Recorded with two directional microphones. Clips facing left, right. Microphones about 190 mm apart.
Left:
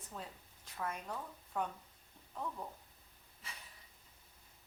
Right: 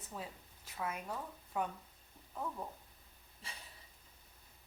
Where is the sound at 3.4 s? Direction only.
30° right (ahead or behind).